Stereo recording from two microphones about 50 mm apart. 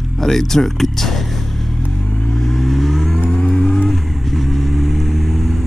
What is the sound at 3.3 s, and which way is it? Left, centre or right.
Vehicle, centre.